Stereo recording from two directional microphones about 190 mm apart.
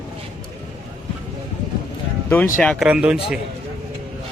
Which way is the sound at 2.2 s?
10° left (ahead or behind).